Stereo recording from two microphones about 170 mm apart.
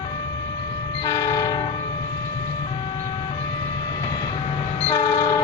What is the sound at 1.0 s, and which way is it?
Train, 20° left (ahead or behind).